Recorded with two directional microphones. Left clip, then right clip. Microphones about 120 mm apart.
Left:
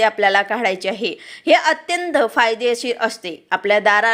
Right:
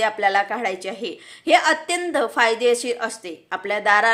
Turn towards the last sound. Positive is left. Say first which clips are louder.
# left 3 dB
turn(degrees=30)  # may be behind; listen again after turning